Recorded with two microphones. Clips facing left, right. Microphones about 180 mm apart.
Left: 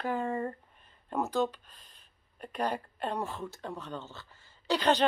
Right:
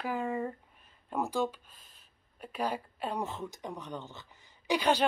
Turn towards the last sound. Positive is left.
turn(degrees=-10)  # may be behind; listen again after turning